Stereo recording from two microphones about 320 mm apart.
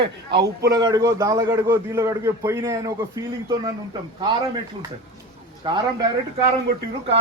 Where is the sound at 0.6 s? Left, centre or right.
Centre.